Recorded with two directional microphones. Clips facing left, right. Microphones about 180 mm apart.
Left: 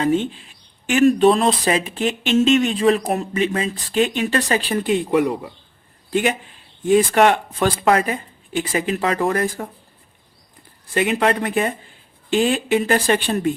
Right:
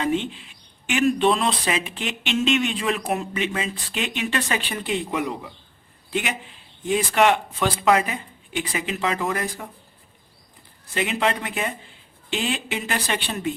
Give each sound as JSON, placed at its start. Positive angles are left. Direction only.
{"t": 0.0, "sound": "speech", "side_deg": 40}
{"t": 10.9, "sound": "speech", "side_deg": 50}